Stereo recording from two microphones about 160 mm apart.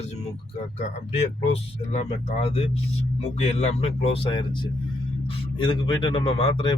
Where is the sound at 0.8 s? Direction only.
45° left (ahead or behind).